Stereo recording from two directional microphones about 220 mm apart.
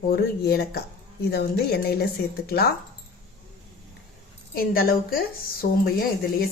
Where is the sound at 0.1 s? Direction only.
45° left (ahead or behind).